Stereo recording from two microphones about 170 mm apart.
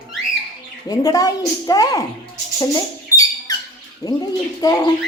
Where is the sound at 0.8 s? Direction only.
20° left (ahead or behind).